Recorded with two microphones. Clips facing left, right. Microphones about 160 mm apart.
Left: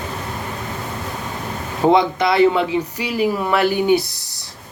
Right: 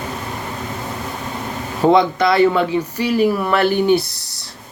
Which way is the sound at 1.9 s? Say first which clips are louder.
Right 2 dB; 15° left (ahead or behind).